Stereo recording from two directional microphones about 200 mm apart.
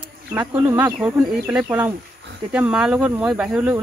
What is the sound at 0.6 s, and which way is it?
Speech, 10° right (ahead or behind).